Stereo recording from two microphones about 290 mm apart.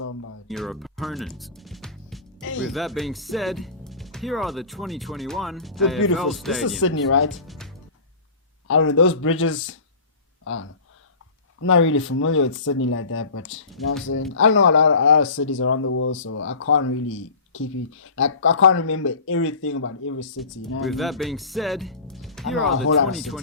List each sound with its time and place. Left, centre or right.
0.0 s a sound: left
0.4 s speech: centre
2.4 s music: left
2.6 s speech: centre
6.7 s speech: left
7.4 s speech: centre
8.6 s speech: left
20.8 s speech: centre